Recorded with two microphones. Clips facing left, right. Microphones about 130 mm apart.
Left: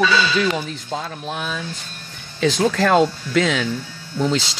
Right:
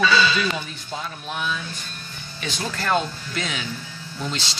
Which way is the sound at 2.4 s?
90° left.